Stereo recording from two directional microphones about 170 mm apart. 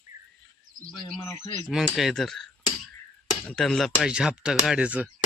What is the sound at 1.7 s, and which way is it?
Speech, centre (ahead or behind).